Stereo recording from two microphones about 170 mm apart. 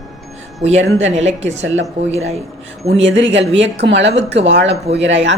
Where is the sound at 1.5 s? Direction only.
90° right.